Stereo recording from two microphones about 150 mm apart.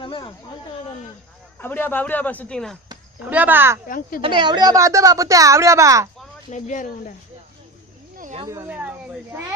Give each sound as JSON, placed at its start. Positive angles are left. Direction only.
{"t": 0.0, "sound": "speech", "side_deg": 35}
{"t": 1.5, "sound": "speech", "side_deg": 15}
{"t": 3.2, "sound": "speech", "side_deg": -10}
{"t": 3.8, "sound": "speech", "side_deg": 70}
{"t": 4.4, "sound": "speech", "side_deg": -30}
{"t": 6.5, "sound": "speech", "side_deg": 60}
{"t": 8.4, "sound": "speech", "side_deg": -15}